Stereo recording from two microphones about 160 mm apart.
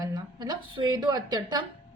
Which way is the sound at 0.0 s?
25° right (ahead or behind).